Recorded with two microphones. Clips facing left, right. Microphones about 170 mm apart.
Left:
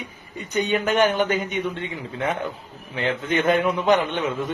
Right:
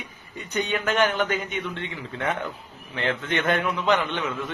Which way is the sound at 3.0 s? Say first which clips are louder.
Left 3 dB; 5° left (ahead or behind).